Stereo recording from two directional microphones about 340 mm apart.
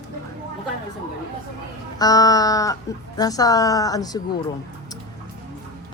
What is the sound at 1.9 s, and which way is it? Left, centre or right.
A man's voice, centre.